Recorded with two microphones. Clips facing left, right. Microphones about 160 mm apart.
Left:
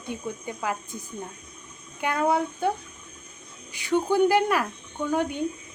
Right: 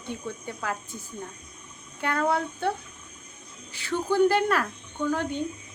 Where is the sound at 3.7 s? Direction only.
15° left (ahead or behind).